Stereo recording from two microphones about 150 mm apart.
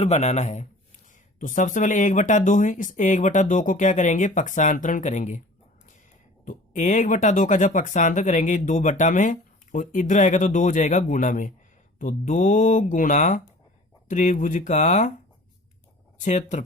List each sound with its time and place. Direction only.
0.0 s speech: 50° left (ahead or behind)
6.4 s speech: 55° left (ahead or behind)
16.2 s speech: 55° left (ahead or behind)